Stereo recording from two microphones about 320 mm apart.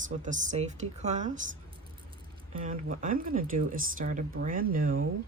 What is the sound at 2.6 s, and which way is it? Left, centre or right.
Speech, right.